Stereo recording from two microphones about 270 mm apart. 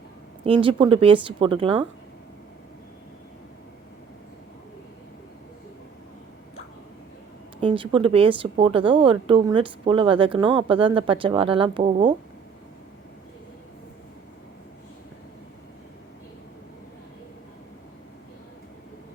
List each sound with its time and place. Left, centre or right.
0.4 s a woman's voice: centre
7.6 s a woman's voice: centre